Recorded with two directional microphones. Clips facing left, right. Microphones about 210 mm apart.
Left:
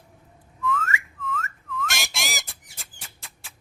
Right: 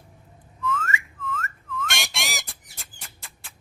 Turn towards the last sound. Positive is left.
turn(degrees=0)  # may be behind; listen again after turning